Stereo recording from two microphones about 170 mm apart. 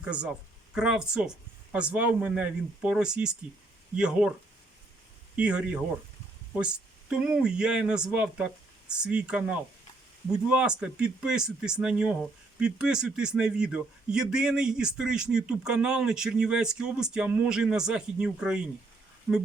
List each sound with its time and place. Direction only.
0.0 s speech: 5° right (ahead or behind)
5.4 s speech: 5° right (ahead or behind)
7.1 s speech: 5° right (ahead or behind)